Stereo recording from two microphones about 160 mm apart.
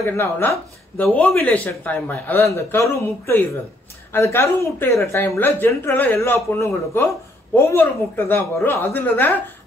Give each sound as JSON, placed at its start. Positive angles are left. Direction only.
{"t": 0.0, "sound": "a woman's voice", "side_deg": 15}